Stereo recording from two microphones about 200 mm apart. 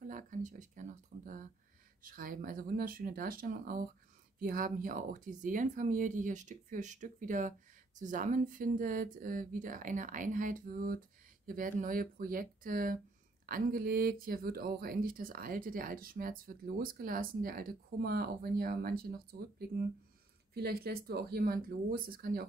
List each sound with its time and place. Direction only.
0.0 s speech: 40° right (ahead or behind)